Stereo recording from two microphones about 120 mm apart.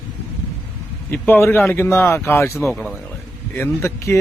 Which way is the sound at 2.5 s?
Centre (ahead or behind).